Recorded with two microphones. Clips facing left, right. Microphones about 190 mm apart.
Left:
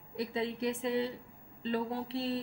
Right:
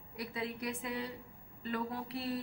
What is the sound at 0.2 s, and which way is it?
A woman's voice, 25° left (ahead or behind).